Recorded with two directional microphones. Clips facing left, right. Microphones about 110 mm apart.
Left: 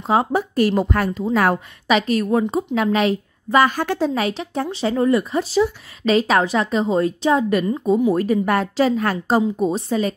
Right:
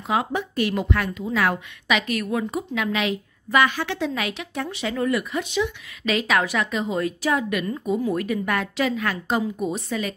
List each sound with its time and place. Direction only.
0.0 s speech: 35° left (ahead or behind)